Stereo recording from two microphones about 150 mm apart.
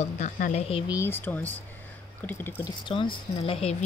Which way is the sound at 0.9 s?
15° left (ahead or behind).